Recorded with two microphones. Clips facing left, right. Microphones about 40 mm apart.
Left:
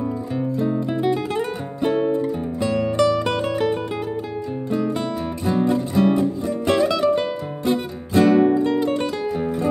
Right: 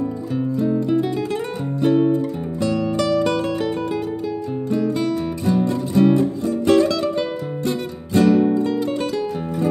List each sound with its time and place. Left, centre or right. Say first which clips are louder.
0.6 s music: right 4 dB; centre
8.2 s music: left 1 dB; left
8.8 s music: even; centre